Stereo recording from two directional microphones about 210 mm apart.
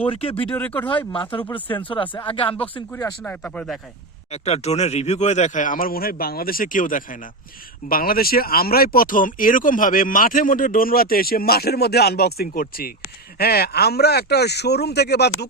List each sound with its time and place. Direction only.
0.1 s speech: 25° left (ahead or behind)
0.5 s speech: 10° left (ahead or behind)
0.9 s speech: 25° left (ahead or behind)
1.4 s speech: 10° left (ahead or behind)
1.7 s speech: 25° left (ahead or behind)
2.9 s speech: 5° left (ahead or behind)
4.3 s speech: 30° left (ahead or behind); by 15.4 s 50° left (ahead or behind)